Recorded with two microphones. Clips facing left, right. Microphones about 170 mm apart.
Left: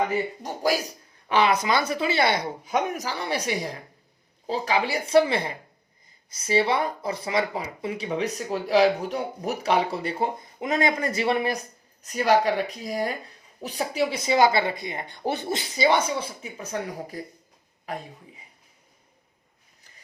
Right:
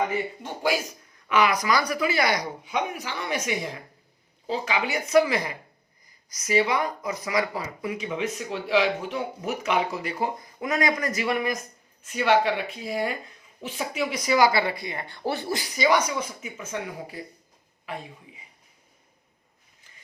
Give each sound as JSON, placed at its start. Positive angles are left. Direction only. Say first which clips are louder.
{"t": 0.4, "sound": "speech", "louder": "even", "side_deg": 40}
{"t": 2.6, "sound": "speech", "louder": "left 4 dB", "side_deg": 45}